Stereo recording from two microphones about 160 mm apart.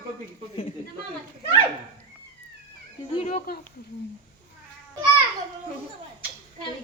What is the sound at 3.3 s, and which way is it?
Speech, 60° left (ahead or behind).